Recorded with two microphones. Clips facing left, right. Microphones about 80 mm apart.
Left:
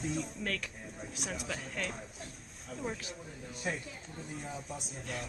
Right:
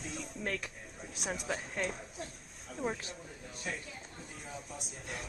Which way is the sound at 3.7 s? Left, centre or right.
Left.